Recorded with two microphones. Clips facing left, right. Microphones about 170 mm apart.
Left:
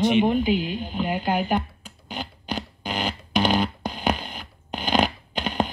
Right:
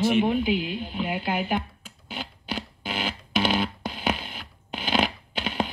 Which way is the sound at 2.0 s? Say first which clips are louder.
Left 3 dB; centre (ahead or behind).